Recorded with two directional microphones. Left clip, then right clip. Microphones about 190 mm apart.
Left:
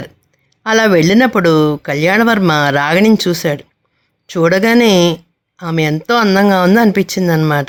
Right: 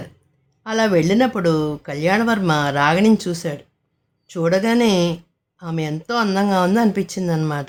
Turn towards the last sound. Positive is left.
turn(degrees=35)  # may be behind; listen again after turning